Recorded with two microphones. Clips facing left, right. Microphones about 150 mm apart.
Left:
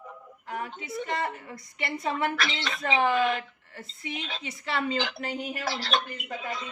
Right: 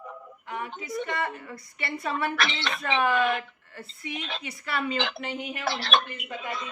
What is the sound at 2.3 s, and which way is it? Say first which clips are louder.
Speech: right 2 dB; 60° right (ahead or behind).